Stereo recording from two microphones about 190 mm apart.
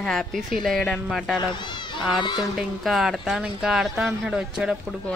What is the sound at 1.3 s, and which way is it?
Children playing, 25° left (ahead or behind).